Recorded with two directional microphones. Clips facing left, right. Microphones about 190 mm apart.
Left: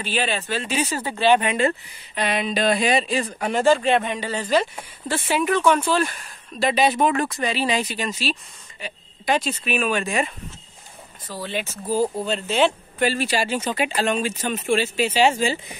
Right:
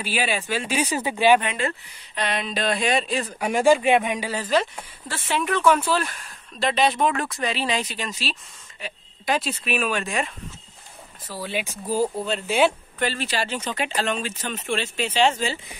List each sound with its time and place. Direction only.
0.0 s speech: 10° right (ahead or behind)
1.4 s speech: 15° left (ahead or behind)
2.1 s speech: 5° left (ahead or behind)
11.2 s speech: 10° right (ahead or behind)
13.0 s speech: 10° left (ahead or behind)